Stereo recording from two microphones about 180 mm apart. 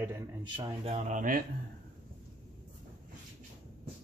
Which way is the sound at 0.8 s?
40° right (ahead or behind).